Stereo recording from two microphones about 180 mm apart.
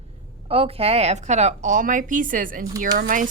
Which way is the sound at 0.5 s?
30° right (ahead or behind).